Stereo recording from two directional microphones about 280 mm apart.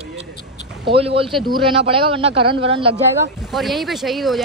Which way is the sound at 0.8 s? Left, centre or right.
Centre.